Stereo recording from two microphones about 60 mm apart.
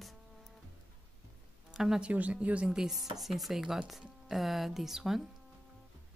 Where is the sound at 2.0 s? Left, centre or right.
Right.